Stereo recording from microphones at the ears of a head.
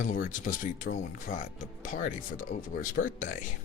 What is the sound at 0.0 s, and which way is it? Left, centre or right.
Speech, left.